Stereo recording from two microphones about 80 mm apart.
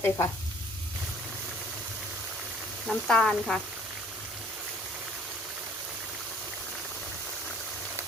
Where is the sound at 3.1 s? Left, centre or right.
Centre.